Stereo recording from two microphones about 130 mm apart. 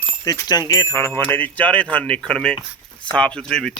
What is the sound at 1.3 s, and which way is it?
Speech, 15° left (ahead or behind).